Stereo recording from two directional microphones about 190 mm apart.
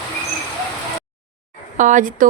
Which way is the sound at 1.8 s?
40° right (ahead or behind).